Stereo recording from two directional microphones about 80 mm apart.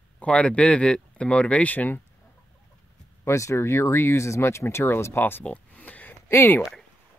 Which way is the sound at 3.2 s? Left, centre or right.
Left.